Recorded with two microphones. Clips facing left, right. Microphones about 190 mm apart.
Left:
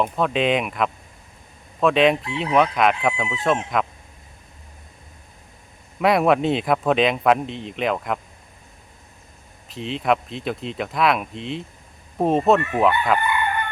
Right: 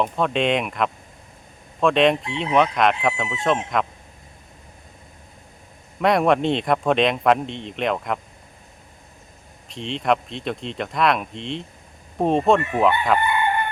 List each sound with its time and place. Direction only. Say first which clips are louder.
0.0 s speech: even; centre (ahead or behind)
6.0 s speech: even; 5° left (ahead or behind)
9.6 s speech: even; 5° left (ahead or behind)